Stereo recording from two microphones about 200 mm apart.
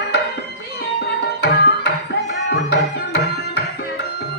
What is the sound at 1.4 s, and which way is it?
Tabla, 55° left (ahead or behind).